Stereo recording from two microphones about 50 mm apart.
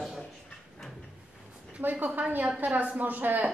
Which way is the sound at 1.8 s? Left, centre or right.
Right.